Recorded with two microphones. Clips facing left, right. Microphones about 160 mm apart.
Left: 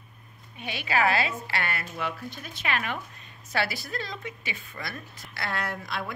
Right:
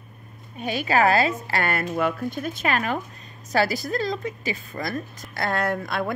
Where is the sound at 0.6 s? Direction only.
40° right (ahead or behind).